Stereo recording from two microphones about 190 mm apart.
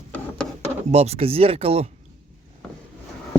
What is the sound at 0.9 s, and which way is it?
Speech, 35° right (ahead or behind).